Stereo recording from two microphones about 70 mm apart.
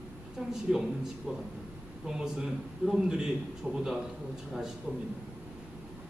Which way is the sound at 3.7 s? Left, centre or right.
Right.